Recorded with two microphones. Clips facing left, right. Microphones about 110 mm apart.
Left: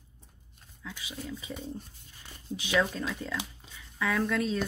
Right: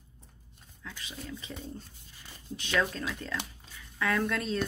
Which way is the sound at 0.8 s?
5° left (ahead or behind).